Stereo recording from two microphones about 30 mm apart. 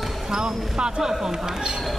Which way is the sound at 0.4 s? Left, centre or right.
Right.